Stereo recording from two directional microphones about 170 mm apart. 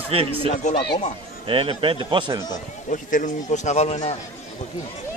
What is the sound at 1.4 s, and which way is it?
Speech, 30° right (ahead or behind).